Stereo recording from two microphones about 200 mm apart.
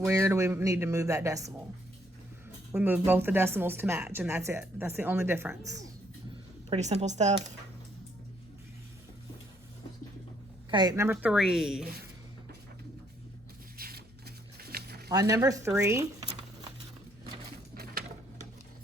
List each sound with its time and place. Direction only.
0.0 s speech: 15° right (ahead or behind)
2.7 s speech: 10° right (ahead or behind)
6.7 s a woman's voice: 35° right (ahead or behind)
10.7 s speech: 20° right (ahead or behind); by 11.9 s centre (ahead or behind)
13.7 s a sound: 50° right (ahead or behind)
15.1 s speech: 15° right (ahead or behind)